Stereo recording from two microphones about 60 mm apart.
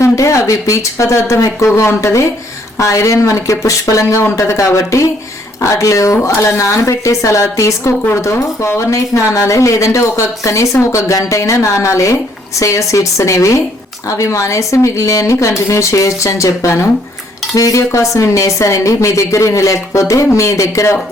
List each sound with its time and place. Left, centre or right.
0.0 s speech: left
1.6 s speech: left
17.5 s speech: left